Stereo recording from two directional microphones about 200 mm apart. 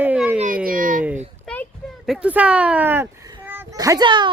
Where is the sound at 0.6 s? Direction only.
45° right (ahead or behind).